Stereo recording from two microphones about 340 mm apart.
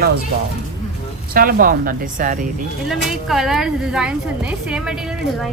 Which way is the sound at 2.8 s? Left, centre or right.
Centre.